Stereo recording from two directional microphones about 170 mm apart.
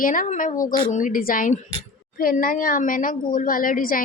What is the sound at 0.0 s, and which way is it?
A woman's voice, 50° left (ahead or behind).